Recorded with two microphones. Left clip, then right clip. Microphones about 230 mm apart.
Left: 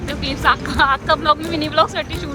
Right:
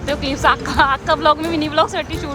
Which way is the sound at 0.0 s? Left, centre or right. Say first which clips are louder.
Right 2 dB; centre.